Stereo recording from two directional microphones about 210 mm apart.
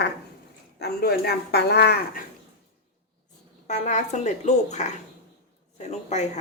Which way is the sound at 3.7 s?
35° left (ahead or behind).